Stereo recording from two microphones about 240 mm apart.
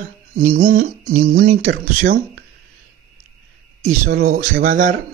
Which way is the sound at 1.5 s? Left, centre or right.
Right.